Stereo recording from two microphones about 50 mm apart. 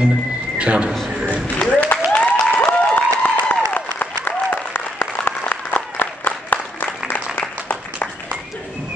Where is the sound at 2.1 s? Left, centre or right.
Left.